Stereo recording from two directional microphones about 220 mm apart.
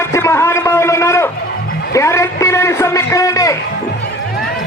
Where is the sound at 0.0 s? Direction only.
10° left (ahead or behind).